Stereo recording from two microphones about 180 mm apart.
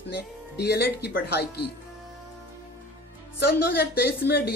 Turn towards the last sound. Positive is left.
turn(degrees=60)  # may be behind; listen again after turning